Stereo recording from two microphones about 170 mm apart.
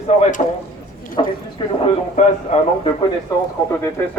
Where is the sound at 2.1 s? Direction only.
45° left (ahead or behind).